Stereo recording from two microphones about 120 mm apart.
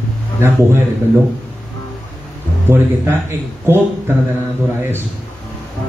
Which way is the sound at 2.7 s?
20° right (ahead or behind).